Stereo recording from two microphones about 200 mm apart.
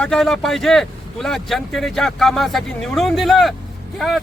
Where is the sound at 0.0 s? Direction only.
Centre (ahead or behind).